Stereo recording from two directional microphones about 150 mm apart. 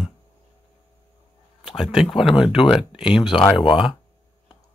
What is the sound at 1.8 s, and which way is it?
Speech, centre (ahead or behind).